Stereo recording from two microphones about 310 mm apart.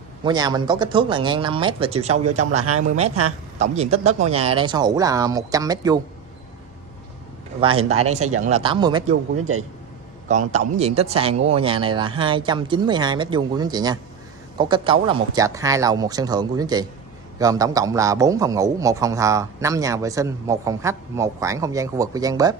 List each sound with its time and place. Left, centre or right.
0.2 s a man's voice: centre
7.6 s a man's voice: centre
9.4 s a man's voice: right
10.2 s a man's voice: right